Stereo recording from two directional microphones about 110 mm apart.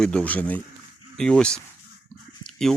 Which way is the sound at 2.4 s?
5° left (ahead or behind).